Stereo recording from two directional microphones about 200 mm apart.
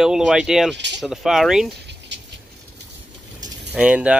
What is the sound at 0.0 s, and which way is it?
Speech, 5° right (ahead or behind).